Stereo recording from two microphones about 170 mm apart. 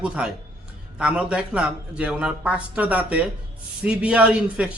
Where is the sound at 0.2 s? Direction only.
5° right (ahead or behind).